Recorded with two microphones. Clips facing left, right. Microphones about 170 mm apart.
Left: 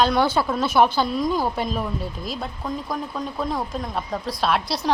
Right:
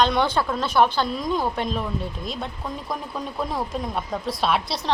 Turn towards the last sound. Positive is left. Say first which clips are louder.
# left 1 dB
turn(degrees=0)  # may be behind; listen again after turning